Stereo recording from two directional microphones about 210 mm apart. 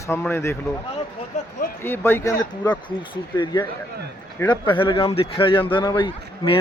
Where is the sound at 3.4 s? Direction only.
20° left (ahead or behind).